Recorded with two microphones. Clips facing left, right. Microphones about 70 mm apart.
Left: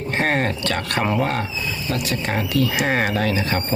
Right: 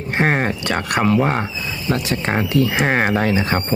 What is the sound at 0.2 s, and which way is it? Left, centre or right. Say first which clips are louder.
Speech: right 3 dB; centre.